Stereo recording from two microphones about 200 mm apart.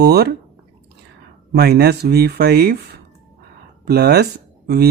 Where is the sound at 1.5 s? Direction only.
55° right (ahead or behind).